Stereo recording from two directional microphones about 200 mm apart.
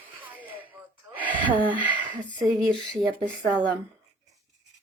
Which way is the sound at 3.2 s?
20° right (ahead or behind).